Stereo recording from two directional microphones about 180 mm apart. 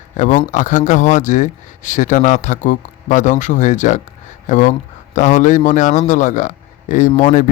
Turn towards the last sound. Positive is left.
turn(degrees=45)  # may be behind; listen again after turning